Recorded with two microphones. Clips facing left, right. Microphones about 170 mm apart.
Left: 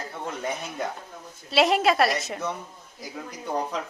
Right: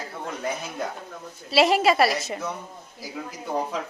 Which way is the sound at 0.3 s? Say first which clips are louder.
Right 1 dB; centre (ahead or behind).